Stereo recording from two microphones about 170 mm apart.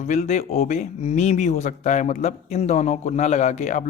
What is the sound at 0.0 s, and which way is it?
Speech, 45° left (ahead or behind).